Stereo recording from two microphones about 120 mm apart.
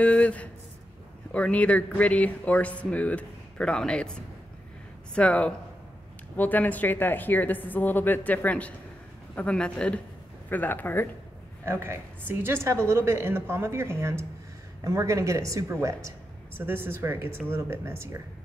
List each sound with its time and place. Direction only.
0.0 s a sound: 10° left (ahead or behind)
1.3 s speech: 10° left (ahead or behind)
11.6 s a woman's voice: 20° right (ahead or behind)